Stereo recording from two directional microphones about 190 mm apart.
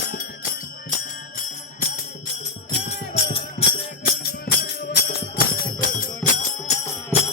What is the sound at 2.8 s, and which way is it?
Music, 30° left (ahead or behind).